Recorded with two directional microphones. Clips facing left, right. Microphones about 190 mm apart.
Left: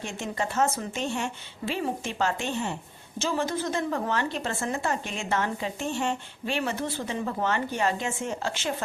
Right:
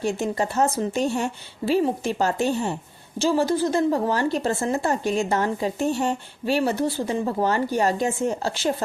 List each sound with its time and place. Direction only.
0.0 s a woman's voice: 35° right (ahead or behind)